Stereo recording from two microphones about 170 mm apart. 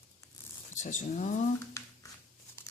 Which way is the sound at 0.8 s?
45° left (ahead or behind).